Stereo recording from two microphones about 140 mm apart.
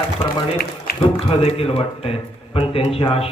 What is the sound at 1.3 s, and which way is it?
A man's voice, 45° left (ahead or behind).